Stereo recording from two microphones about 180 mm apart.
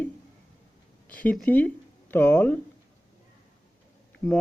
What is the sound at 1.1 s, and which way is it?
Speech, 10° left (ahead or behind).